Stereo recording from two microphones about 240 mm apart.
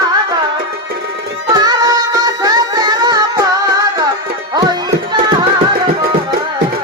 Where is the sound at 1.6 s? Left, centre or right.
Centre.